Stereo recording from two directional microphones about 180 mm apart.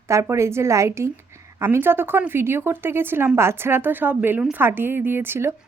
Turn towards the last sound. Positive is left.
turn(degrees=-15)  # may be behind; listen again after turning